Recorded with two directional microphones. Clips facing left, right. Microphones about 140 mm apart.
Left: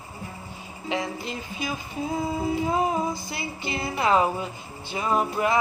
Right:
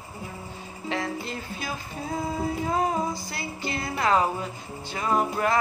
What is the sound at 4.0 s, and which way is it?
Music, 15° left (ahead or behind).